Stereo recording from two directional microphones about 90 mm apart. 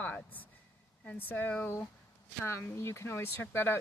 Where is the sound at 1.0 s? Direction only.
20° left (ahead or behind).